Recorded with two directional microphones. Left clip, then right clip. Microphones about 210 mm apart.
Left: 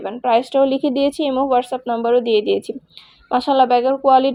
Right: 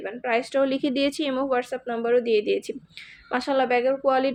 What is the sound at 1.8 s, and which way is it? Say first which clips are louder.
Speech: left 7 dB; 20° left (ahead or behind).